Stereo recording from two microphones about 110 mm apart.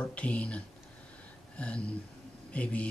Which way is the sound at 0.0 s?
10° left (ahead or behind).